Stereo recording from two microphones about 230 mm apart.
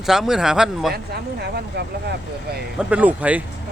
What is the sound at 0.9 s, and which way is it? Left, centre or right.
Speech, right.